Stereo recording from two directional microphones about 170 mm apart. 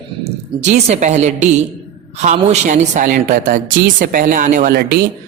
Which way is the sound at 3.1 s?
55° right (ahead or behind).